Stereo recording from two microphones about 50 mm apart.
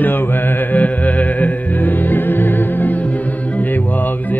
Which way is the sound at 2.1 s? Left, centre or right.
Left.